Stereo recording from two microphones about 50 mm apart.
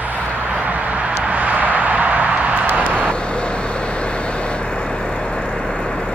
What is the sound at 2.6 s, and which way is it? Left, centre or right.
Vehicle, right.